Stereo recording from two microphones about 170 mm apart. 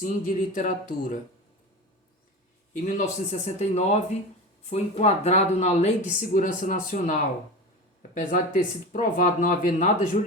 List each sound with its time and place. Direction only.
0.0 s speech: 50° left (ahead or behind)
2.7 s speech: 45° left (ahead or behind)
8.1 s speech: 50° left (ahead or behind)